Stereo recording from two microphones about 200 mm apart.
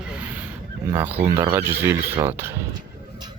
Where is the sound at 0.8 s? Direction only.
10° right (ahead or behind).